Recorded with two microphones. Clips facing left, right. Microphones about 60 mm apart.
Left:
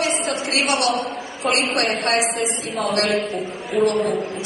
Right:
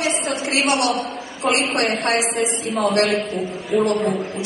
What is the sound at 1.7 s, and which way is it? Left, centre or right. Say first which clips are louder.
A man's voice: right 1 dB; centre.